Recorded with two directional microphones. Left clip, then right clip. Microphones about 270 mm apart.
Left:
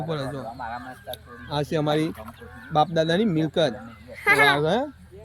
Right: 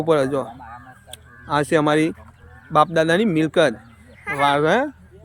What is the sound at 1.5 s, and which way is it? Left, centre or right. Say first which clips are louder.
Speech: right 7 dB; centre.